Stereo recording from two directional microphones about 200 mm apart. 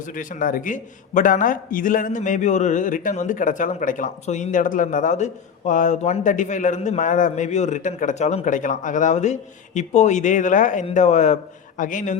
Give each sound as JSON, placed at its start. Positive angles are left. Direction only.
{"t": 0.0, "sound": "a man's voice", "side_deg": 40}